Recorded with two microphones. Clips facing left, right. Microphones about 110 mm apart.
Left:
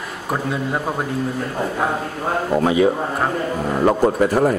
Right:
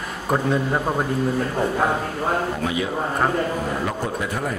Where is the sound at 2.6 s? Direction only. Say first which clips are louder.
Left 8 dB; 40° left (ahead or behind).